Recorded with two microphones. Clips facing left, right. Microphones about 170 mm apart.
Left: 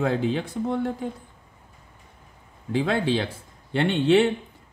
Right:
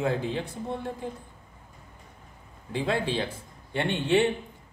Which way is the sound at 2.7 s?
80° left.